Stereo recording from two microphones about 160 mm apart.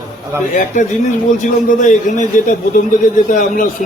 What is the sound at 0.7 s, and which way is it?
A man's voice, 50° left (ahead or behind).